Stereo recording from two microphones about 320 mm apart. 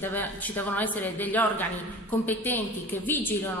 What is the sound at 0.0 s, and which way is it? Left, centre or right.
A woman's voice, centre.